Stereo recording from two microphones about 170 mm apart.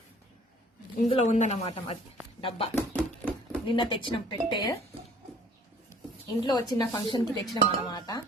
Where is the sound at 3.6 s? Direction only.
30° left (ahead or behind).